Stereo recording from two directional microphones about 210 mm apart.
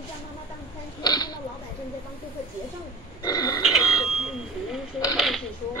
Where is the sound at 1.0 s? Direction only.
20° left (ahead or behind).